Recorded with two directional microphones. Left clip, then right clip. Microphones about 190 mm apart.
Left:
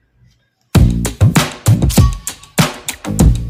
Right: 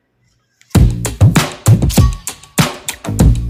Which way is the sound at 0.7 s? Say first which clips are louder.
Left 1 dB; centre (ahead or behind).